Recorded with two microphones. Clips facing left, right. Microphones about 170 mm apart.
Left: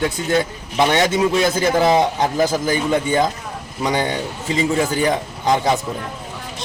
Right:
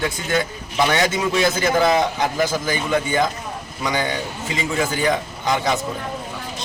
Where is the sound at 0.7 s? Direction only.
30° left (ahead or behind).